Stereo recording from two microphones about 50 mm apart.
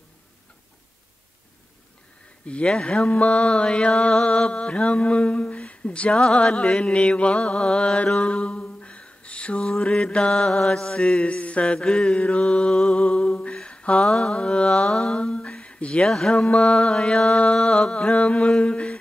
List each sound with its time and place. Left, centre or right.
2.4 s mantra: left
14.9 s speech: centre
16.1 s mantra: centre
18.6 s a sound: left